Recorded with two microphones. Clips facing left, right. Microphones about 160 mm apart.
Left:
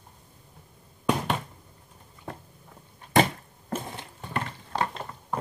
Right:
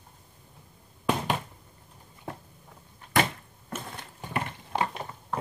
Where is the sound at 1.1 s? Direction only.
5° right (ahead or behind).